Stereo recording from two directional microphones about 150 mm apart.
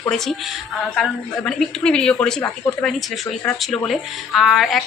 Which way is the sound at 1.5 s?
5° left (ahead or behind).